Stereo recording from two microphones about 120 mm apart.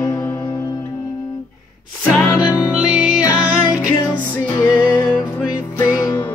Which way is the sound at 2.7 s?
10° right (ahead or behind).